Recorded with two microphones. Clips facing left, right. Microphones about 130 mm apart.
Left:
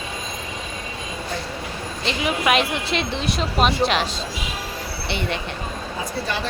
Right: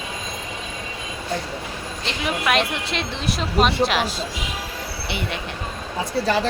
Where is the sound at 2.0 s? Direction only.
Centre (ahead or behind).